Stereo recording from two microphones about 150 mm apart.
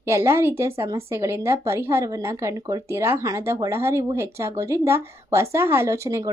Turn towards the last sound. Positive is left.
turn(degrees=-20)  # may be behind; listen again after turning